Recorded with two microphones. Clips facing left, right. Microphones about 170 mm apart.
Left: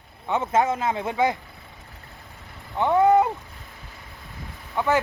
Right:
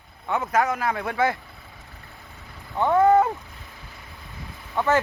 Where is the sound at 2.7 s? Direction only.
15° left (ahead or behind).